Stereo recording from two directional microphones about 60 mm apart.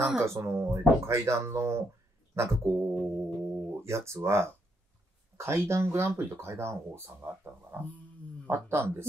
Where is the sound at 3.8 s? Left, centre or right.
Right.